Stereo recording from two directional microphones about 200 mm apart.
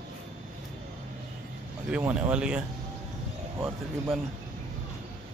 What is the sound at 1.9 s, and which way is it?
Speech, 5° right (ahead or behind).